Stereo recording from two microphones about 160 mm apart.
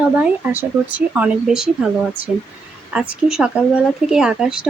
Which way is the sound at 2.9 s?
5° right (ahead or behind).